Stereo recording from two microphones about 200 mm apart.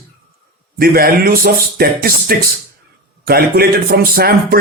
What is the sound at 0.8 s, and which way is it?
Speech, 50° right (ahead or behind).